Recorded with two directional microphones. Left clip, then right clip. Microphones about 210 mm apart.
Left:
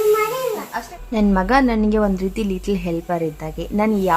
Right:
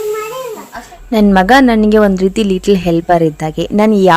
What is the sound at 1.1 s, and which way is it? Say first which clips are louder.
A woman's voice: right 9 dB; 40° right (ahead or behind).